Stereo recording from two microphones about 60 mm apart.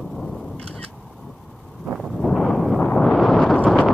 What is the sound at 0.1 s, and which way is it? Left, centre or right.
Single-lens reflex camera, centre.